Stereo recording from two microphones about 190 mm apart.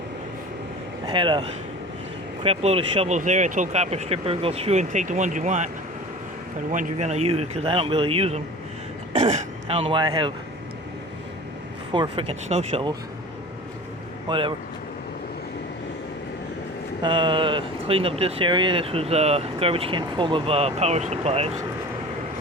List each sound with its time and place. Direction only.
1.0 s speech: 25° right (ahead or behind)
11.9 s speech: 25° right (ahead or behind)
14.3 s speech: 25° right (ahead or behind)
17.0 s speech: 25° right (ahead or behind)